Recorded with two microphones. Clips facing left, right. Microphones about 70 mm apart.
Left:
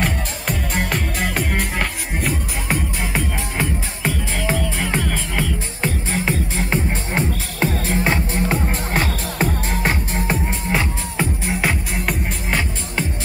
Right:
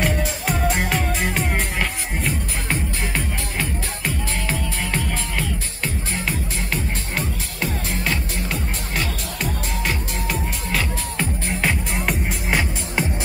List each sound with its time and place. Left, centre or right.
0.0 s music: centre
3.5 s music: centre
5.8 s music: left
11.4 s music: centre